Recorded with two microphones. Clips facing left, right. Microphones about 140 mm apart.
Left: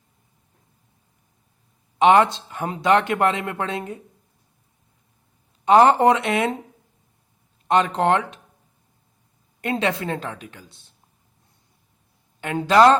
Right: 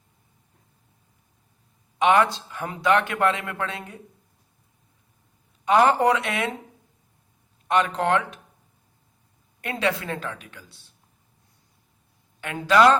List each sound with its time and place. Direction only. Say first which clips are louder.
2.0 s speech: left 4 dB; 25° left (ahead or behind)
5.6 s speech: left 4 dB; 25° left (ahead or behind)
7.7 s speech: left 3 dB; 25° left (ahead or behind)
9.6 s speech: left 3 dB; 25° left (ahead or behind)
12.4 s speech: left 3 dB; 25° left (ahead or behind)